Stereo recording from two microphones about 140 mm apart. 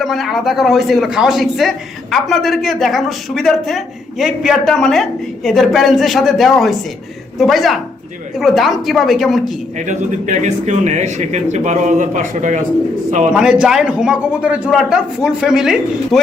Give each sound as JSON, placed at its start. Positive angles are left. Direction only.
{"t": 0.0, "sound": "a man's voice", "side_deg": 0}
{"t": 9.7, "sound": "speech", "side_deg": -60}
{"t": 13.3, "sound": "a man's voice", "side_deg": -5}